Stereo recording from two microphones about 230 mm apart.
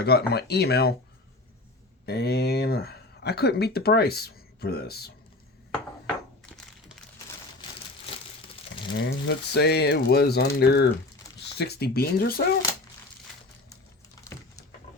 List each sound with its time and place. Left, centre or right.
0.0 s speech: left
2.0 s speech: left
9.0 s speech: left